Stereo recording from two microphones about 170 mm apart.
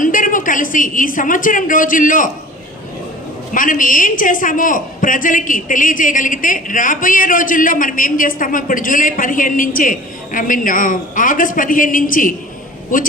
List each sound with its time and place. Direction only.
0.0 s a woman's voice: 50° left (ahead or behind)
3.5 s a woman's voice: 50° left (ahead or behind)